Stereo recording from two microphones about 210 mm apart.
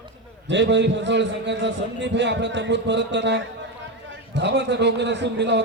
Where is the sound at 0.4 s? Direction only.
55° right (ahead or behind).